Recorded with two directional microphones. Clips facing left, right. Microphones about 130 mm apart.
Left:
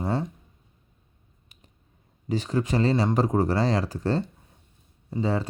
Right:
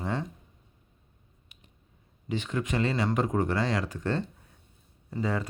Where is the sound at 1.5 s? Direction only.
40° left (ahead or behind).